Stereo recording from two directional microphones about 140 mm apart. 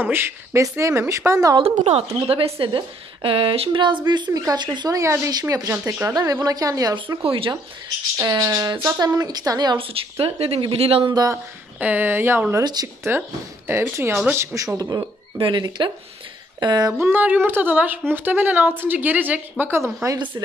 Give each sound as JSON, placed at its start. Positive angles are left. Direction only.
{"t": 0.0, "sound": "a woman's voice", "side_deg": -15}
{"t": 1.8, "sound": "a woman's voice", "side_deg": -50}
{"t": 7.2, "sound": "speech", "side_deg": -40}
{"t": 8.2, "sound": "a woman's voice", "side_deg": -25}
{"t": 9.9, "sound": "speech", "side_deg": -40}
{"t": 11.8, "sound": "a woman's voice", "side_deg": -15}
{"t": 17.0, "sound": "a woman's voice", "side_deg": -15}